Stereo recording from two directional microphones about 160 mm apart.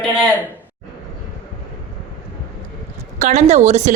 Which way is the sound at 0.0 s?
5° left (ahead or behind).